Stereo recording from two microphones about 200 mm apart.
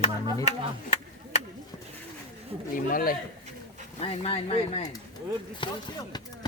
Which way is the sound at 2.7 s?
45° left (ahead or behind).